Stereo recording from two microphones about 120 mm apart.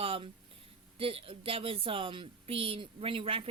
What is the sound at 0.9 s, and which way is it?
A woman's voice, 50° right (ahead or behind).